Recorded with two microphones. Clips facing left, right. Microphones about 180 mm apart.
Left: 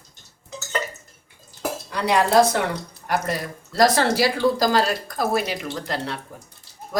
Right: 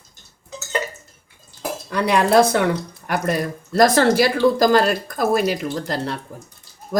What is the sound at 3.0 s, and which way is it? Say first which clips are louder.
Speech: right 3 dB; 55° right (ahead or behind).